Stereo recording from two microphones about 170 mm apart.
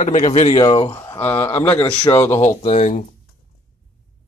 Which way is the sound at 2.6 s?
45° left (ahead or behind).